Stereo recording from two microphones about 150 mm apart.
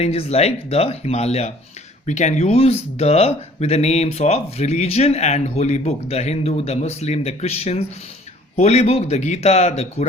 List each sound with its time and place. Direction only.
0.0 s speech: 45° left (ahead or behind)